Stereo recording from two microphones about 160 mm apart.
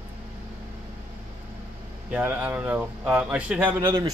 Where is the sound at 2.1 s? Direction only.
10° right (ahead or behind).